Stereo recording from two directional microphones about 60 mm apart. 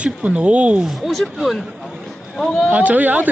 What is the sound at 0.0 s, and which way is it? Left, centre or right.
Speech, centre.